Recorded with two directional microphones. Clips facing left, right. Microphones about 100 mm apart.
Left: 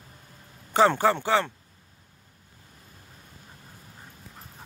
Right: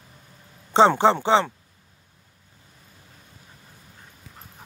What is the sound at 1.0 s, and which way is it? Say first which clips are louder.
Speech: right 4 dB; 20° right (ahead or behind).